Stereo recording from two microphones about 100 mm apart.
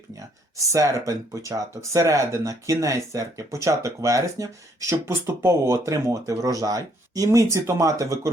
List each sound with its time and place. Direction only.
0.5 s speech: 30° right (ahead or behind)